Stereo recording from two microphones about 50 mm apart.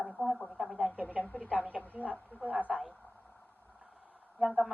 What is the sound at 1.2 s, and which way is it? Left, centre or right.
Speech, left.